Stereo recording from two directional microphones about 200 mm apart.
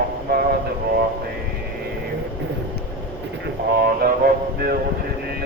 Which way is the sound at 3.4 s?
50° right (ahead or behind).